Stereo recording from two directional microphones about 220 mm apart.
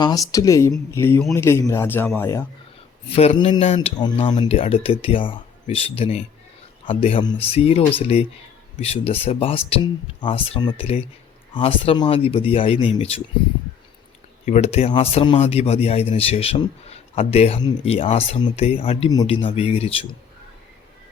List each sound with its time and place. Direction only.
0.0 s a man's voice: 15° left (ahead or behind)
3.1 s speech: 25° left (ahead or behind)
14.4 s speech: 30° left (ahead or behind)